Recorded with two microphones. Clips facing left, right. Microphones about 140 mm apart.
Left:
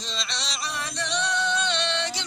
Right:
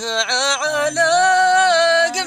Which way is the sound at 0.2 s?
90° right.